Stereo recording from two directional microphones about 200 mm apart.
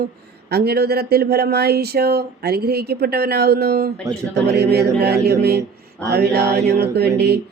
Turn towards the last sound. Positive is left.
turn(degrees=-55)  # may be behind; listen again after turning